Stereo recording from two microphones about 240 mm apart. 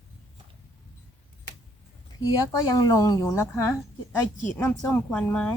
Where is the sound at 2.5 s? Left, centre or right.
Centre.